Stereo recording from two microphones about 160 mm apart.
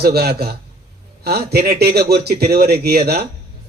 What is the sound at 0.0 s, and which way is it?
A man's voice, 80° right.